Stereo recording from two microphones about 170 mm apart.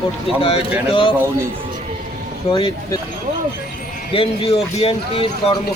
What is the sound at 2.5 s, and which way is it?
Speech, 30° left (ahead or behind).